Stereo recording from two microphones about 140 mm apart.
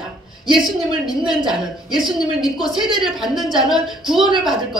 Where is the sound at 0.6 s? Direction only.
30° left (ahead or behind).